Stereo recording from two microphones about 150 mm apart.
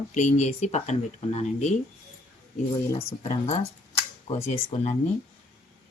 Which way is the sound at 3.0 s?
40° left (ahead or behind).